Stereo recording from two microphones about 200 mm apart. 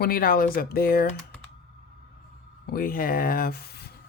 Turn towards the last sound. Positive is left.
turn(degrees=50)  # may be behind; listen again after turning